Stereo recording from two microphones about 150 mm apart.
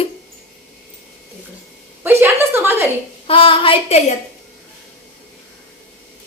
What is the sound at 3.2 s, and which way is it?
Speech, 35° left (ahead or behind).